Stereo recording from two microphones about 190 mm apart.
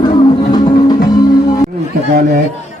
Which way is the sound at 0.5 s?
20° left (ahead or behind).